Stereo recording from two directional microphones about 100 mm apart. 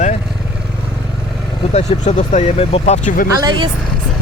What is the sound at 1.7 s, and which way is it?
Speech, 90° left.